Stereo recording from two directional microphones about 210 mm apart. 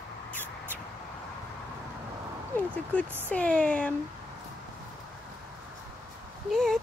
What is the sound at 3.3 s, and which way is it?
Speech, 5° left (ahead or behind).